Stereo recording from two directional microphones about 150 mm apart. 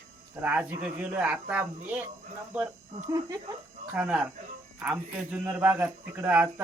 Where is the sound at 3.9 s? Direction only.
10° right (ahead or behind).